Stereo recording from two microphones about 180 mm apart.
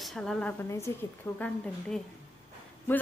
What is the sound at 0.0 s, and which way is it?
A woman's voice, centre (ahead or behind).